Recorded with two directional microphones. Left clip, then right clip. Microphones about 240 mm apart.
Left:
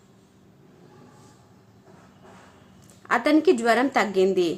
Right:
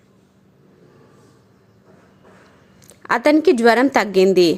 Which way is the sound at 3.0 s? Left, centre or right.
Right.